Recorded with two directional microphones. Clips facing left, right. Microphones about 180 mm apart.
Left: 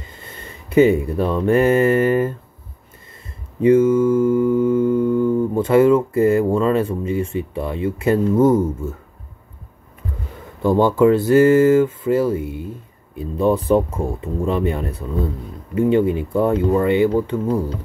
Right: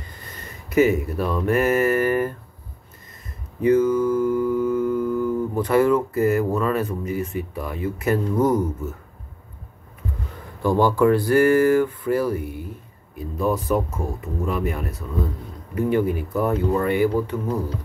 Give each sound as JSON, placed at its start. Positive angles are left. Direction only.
{"t": 0.0, "sound": "speech", "side_deg": 25}
{"t": 3.6, "sound": "mantra", "side_deg": 25}
{"t": 10.6, "sound": "mantra", "side_deg": 20}